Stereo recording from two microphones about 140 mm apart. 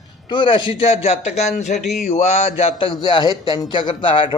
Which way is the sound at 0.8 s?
45° left (ahead or behind).